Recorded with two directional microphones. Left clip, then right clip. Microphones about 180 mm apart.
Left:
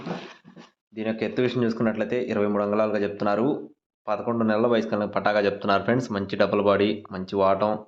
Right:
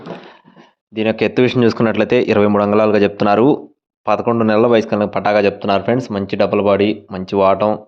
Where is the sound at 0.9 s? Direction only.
45° right (ahead or behind).